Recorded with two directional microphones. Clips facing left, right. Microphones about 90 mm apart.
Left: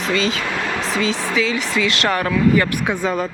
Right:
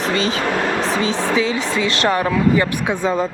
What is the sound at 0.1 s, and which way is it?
Speech, 35° right (ahead or behind).